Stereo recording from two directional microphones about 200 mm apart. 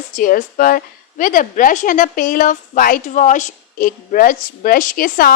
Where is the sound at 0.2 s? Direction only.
40° left (ahead or behind).